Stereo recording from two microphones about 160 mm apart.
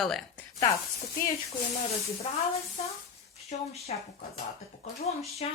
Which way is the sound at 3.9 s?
45° left (ahead or behind).